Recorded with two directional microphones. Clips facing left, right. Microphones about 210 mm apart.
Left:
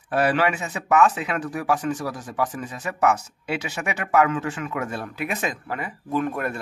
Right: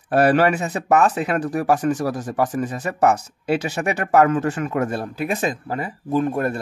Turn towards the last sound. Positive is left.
turn(degrees=-35)  # may be behind; listen again after turning